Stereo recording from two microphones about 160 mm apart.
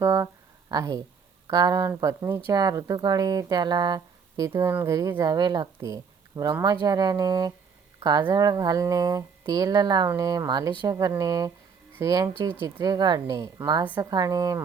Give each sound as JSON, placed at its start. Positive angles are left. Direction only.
{"t": 0.0, "sound": "speech", "side_deg": -20}